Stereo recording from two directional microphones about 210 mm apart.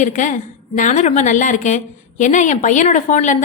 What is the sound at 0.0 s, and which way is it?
A woman's voice, 35° left (ahead or behind).